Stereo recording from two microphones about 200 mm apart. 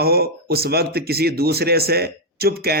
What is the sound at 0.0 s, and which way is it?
A man's voice, 50° right (ahead or behind).